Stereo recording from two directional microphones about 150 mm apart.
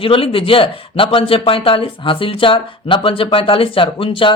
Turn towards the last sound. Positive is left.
turn(degrees=35)  # may be behind; listen again after turning